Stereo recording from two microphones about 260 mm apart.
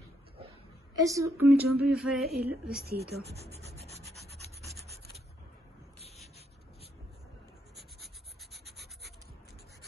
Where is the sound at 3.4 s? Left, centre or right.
Right.